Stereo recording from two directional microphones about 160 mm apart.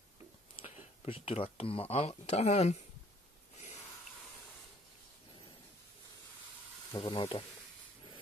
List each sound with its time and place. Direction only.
0.7 s speech: 40° left (ahead or behind)
7.0 s speech: 30° left (ahead or behind)